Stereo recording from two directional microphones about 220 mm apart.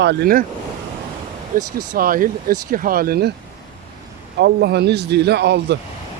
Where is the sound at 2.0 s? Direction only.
40° right (ahead or behind).